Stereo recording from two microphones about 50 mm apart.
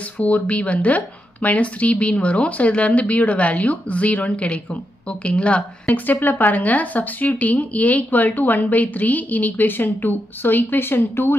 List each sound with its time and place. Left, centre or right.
0.2 s speech: left
5.9 s speech: left